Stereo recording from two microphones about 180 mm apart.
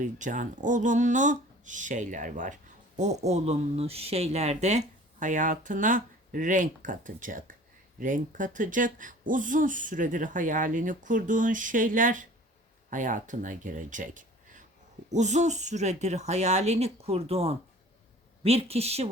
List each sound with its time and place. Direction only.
0.0 s speech: 45° right (ahead or behind)